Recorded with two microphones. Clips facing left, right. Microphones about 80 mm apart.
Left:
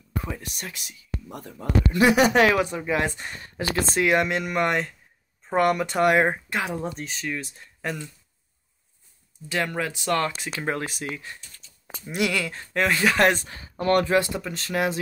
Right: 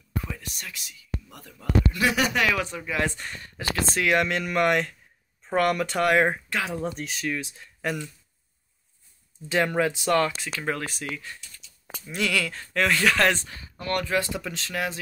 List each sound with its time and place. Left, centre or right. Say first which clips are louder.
0.7 s a man's voice: even; left
2.0 s speech: left 8 dB; centre
2.3 s a man's voice: left 6 dB; left
2.6 s speech: left 3 dB; centre
3.1 s speech: even; centre
7.0 s speech: right 1 dB; centre
9.5 s speech: right 4 dB; centre
10.6 s speech: left 2 dB; left; by 13.2 s centre
13.6 s speech: left 7 dB; left
14.3 s speech: left 3 dB; centre